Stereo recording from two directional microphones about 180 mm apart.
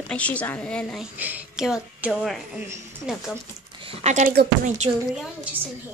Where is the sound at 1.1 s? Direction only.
10° right (ahead or behind).